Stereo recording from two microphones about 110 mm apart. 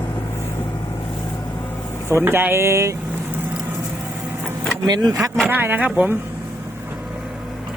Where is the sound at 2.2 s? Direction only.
20° right (ahead or behind).